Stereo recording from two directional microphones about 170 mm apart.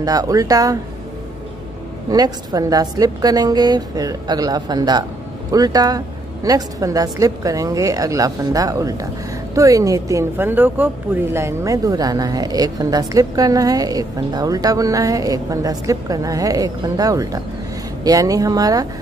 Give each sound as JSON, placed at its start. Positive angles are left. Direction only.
{"t": 0.0, "sound": "speech", "side_deg": -20}
{"t": 2.0, "sound": "speech", "side_deg": -20}